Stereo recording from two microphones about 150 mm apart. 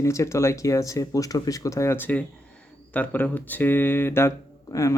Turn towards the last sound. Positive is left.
turn(degrees=20)  # may be behind; listen again after turning